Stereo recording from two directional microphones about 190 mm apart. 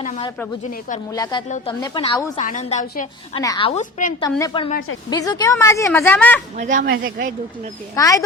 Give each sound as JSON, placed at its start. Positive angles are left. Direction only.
{"t": 0.0, "sound": "a woman's voice", "side_deg": 35}
{"t": 1.1, "sound": "a woman's voice", "side_deg": 20}
{"t": 1.5, "sound": "a woman's voice", "side_deg": 40}
{"t": 2.0, "sound": "a woman's voice", "side_deg": 20}
{"t": 2.3, "sound": "a woman's voice", "side_deg": 40}
{"t": 3.3, "sound": "a woman's voice", "side_deg": 25}
{"t": 3.7, "sound": "a woman's voice", "side_deg": 40}
{"t": 4.2, "sound": "a woman's voice", "side_deg": 20}
{"t": 6.6, "sound": "speech", "side_deg": -40}
{"t": 6.8, "sound": "speech", "side_deg": -80}
{"t": 7.9, "sound": "a woman's voice", "side_deg": 20}